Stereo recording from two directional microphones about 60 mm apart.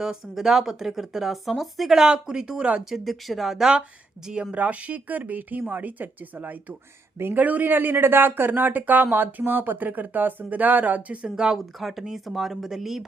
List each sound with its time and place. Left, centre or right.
0.0 s speech: centre
2.9 s speech: centre
4.5 s speech: right
11.5 s speech: centre